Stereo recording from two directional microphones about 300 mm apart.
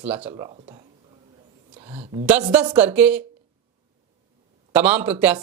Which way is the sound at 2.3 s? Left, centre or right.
Centre.